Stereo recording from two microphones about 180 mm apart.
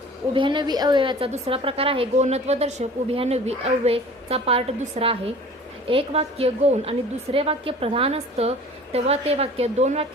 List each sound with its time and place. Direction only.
0.3 s a woman's voice: 25° right (ahead or behind)